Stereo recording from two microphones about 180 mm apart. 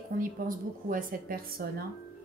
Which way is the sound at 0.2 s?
50° right (ahead or behind).